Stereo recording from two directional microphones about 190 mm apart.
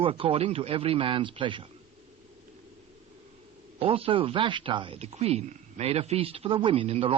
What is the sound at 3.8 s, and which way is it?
Speech, 30° right (ahead or behind).